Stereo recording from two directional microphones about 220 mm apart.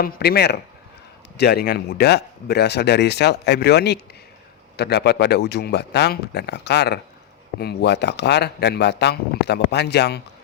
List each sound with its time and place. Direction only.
0.0 s speech: 45° left (ahead or behind)